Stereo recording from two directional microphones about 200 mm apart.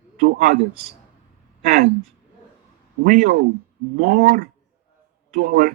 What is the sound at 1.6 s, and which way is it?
Speech, 50° right (ahead or behind).